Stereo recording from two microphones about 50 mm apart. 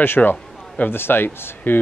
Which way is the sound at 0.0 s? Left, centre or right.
Left.